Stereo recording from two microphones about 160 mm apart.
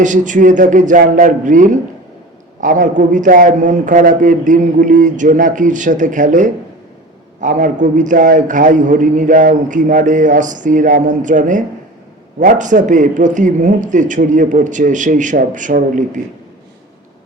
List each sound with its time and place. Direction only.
0.0 s a man's voice: 50° right (ahead or behind)